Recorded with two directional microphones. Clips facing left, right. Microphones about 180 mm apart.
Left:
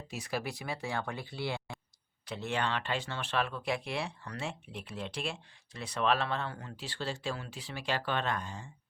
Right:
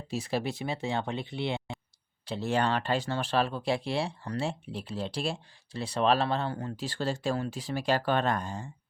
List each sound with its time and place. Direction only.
0.1 s speech: 30° right (ahead or behind)